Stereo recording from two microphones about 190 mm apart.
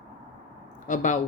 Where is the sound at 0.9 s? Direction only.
40° left (ahead or behind).